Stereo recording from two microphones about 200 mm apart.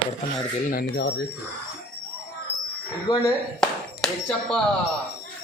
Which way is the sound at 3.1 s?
20° left (ahead or behind).